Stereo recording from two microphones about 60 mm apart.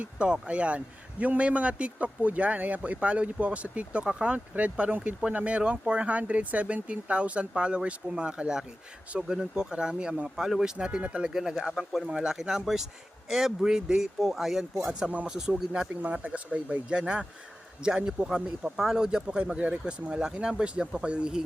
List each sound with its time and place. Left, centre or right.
0.0 s speech: centre
11.3 s speech: centre
12.0 s speech: centre
15.9 s speech: right